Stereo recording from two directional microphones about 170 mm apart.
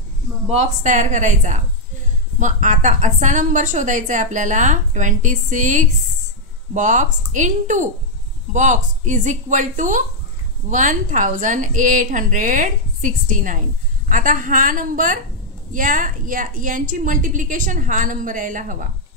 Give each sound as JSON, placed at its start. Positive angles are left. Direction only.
{"t": 0.5, "sound": "a woman's voice", "side_deg": -45}